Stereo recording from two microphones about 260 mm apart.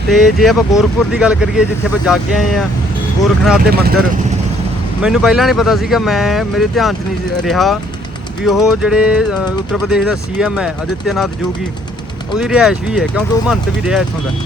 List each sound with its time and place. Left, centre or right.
0.1 s speech: centre
5.0 s speech: centre
12.3 s speech: centre